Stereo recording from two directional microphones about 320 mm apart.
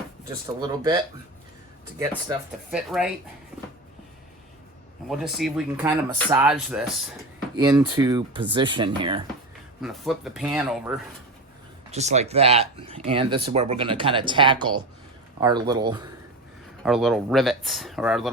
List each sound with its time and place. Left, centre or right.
0.6 s speech: centre
5.0 s speech: centre
9.8 s speech: centre
11.9 s speech: right
16.8 s speech: centre